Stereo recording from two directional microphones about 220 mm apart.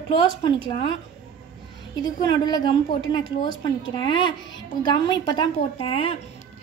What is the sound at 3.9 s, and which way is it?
A woman's voice, 20° left (ahead or behind).